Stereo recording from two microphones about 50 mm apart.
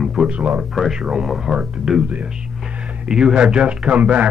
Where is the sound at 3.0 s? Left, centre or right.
Centre.